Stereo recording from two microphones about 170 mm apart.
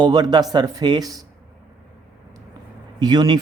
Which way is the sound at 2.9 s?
25° right (ahead or behind).